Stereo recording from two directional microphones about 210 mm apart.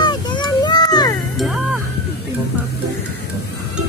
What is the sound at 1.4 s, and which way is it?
Music, centre (ahead or behind).